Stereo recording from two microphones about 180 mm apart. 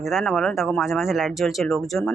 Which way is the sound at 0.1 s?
Centre (ahead or behind).